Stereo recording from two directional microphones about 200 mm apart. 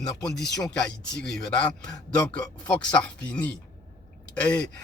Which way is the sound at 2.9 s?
5° left (ahead or behind).